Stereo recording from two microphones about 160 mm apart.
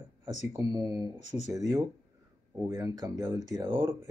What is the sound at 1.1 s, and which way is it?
Speech, 45° left (ahead or behind).